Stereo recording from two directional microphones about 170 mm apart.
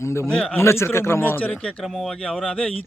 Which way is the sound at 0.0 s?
15° left (ahead or behind).